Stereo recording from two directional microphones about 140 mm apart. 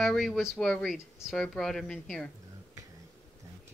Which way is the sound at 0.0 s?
Centre (ahead or behind).